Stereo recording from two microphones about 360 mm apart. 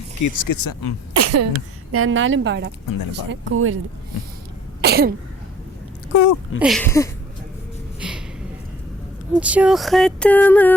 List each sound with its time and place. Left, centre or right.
0.2 s speech: left
1.1 s sneeze: right
1.9 s a woman's voice: right
4.8 s cough: right
6.1 s speech: left
6.6 s a sound: centre
9.3 s a sound: centre